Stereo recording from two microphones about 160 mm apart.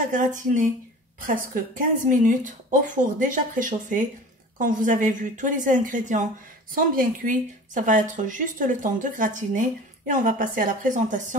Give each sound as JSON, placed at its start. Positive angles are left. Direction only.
{"t": 0.1, "sound": "a woman's voice", "side_deg": -55}